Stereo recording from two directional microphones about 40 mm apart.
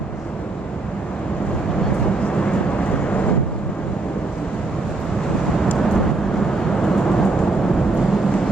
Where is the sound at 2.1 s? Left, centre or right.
Left.